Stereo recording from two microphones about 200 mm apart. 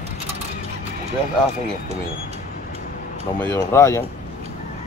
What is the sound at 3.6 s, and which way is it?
Speech, 15° left (ahead or behind).